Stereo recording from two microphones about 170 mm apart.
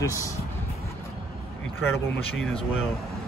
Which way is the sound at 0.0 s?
20° left (ahead or behind).